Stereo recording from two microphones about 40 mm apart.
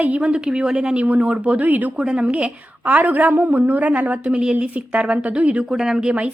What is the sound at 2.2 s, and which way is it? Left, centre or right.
A woman's voice, right.